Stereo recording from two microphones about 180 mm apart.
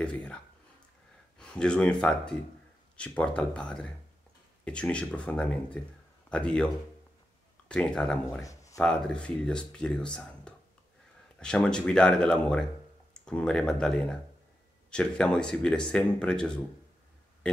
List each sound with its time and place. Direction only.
0.0 s speech: 5° left (ahead or behind)
1.4 s speech: 5° left (ahead or behind)
8.3 s speech: 20° left (ahead or behind)
8.7 s speech: 5° left (ahead or behind)